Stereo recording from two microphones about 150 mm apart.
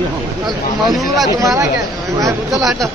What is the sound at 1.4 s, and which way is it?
Speech, 20° right (ahead or behind).